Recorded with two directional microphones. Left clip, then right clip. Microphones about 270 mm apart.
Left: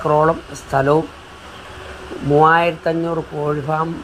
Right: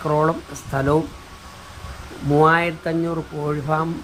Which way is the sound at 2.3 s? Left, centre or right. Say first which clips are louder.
Left 4 dB; centre.